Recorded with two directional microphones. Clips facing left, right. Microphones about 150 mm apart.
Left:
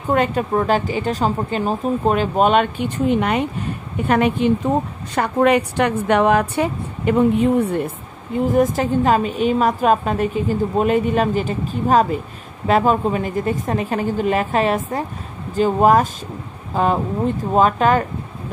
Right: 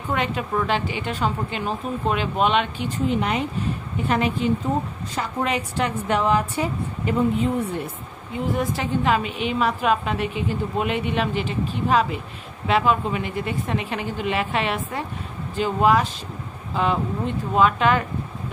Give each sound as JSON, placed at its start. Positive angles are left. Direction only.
{"t": 0.1, "sound": "a woman's voice", "side_deg": 45}